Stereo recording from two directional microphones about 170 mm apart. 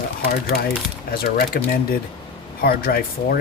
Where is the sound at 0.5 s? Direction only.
65° left (ahead or behind).